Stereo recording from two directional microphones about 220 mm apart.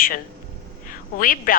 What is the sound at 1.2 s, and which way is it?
Speech, 40° left (ahead or behind).